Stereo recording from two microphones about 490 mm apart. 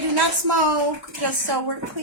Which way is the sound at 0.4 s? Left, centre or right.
Right.